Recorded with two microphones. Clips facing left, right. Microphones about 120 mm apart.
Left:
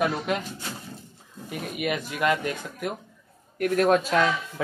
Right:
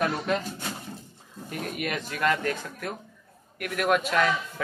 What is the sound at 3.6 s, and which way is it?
Speech, 35° left (ahead or behind).